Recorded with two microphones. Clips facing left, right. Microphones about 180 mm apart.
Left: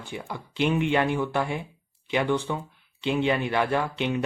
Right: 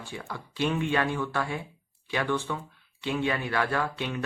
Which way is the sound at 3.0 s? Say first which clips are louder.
Left 4 dB; 20° left (ahead or behind).